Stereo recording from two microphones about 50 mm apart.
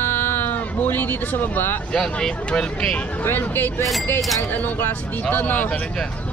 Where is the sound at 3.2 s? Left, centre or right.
Left.